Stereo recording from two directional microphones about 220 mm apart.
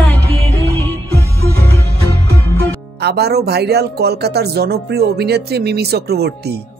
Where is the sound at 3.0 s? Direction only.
45° right (ahead or behind).